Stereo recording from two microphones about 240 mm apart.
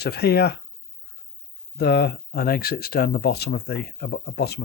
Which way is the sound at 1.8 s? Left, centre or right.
Left.